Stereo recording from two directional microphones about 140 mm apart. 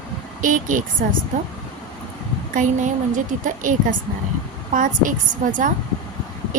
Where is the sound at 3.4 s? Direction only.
70° right (ahead or behind).